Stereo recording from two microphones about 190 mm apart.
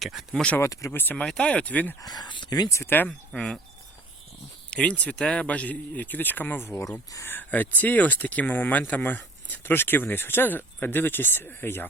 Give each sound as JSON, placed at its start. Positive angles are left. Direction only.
{"t": 0.0, "sound": "speech", "side_deg": 0}
{"t": 2.0, "sound": "speech", "side_deg": 20}
{"t": 4.7, "sound": "speech", "side_deg": 5}